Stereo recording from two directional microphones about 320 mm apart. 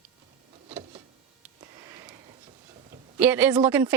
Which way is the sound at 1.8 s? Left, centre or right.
Centre.